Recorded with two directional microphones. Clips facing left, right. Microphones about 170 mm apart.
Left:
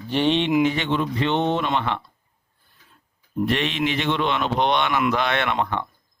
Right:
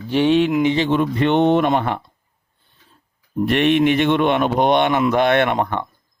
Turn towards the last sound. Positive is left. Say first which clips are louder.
# right 5 dB
turn(degrees=-50)  # may be behind; listen again after turning